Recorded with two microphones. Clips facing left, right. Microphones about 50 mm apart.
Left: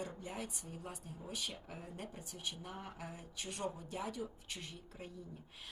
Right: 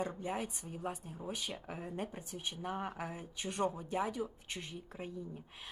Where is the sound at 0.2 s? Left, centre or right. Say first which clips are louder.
Right 6 dB; right.